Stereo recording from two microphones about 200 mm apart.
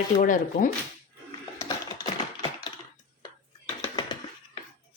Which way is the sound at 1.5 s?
20° left (ahead or behind).